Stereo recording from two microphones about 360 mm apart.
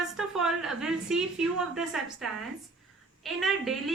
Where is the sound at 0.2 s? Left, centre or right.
Centre.